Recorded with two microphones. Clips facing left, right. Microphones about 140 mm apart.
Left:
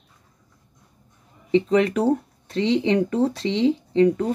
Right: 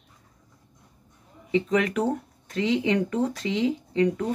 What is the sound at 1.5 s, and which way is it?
Speech, 30° left (ahead or behind).